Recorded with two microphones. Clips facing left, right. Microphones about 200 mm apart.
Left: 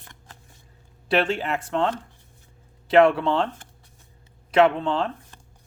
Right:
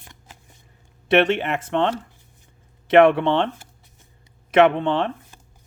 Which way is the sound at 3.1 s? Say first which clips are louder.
Right 3 dB; 25° right (ahead or behind).